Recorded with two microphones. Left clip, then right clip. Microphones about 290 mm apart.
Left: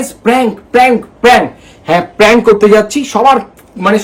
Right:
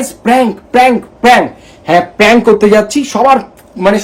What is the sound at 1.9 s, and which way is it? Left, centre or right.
Speech, centre.